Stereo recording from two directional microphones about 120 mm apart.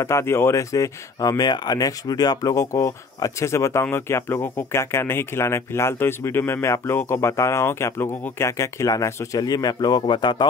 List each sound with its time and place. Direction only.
0.0 s speech: 20° left (ahead or behind); by 10.3 s 40° left (ahead or behind)